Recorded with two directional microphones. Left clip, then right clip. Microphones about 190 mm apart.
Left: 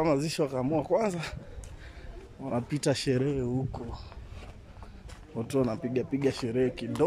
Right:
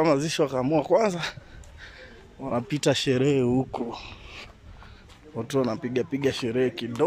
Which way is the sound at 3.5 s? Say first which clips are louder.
Right 8 dB; 20° right (ahead or behind).